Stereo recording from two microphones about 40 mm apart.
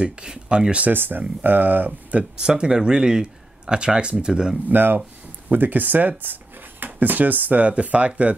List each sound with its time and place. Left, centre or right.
0.0 s speech: right
0.9 s speech: right
2.4 s speech: right
4.6 s speech: right